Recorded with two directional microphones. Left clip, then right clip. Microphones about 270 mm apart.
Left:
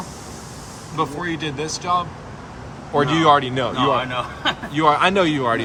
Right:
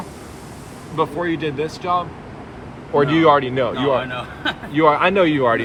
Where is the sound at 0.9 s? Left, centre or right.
Centre.